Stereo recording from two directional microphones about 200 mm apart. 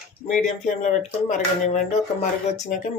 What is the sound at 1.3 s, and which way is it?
Speech, 40° left (ahead or behind).